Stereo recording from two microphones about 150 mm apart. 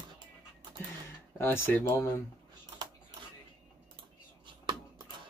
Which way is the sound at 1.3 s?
15° left (ahead or behind).